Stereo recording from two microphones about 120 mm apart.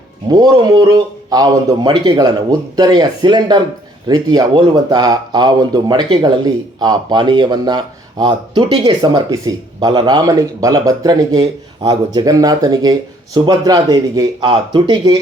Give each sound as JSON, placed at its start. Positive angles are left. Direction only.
{"t": 0.3, "sound": "speech", "side_deg": -35}